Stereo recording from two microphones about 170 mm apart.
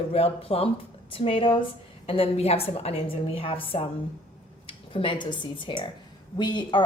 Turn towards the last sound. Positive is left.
turn(degrees=25)  # may be behind; listen again after turning